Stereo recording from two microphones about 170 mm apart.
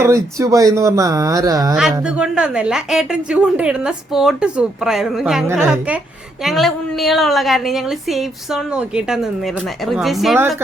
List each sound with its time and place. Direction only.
0.0 s speech: 20° right (ahead or behind)
1.7 s a woman's voice: 5° right (ahead or behind)